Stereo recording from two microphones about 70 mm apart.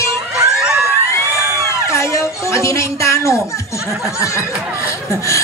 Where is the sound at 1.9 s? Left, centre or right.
Left.